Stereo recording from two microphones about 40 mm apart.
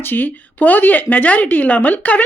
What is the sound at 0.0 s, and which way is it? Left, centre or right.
Speech, left.